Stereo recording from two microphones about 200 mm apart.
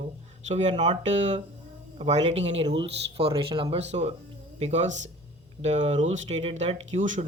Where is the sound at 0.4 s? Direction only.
35° right (ahead or behind).